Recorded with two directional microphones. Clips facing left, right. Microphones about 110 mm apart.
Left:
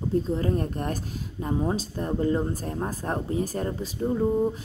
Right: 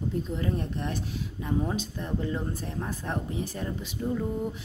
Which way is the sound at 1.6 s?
35° left (ahead or behind).